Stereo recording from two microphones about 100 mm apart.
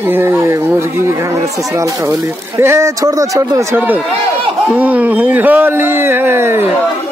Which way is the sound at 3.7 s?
15° right (ahead or behind).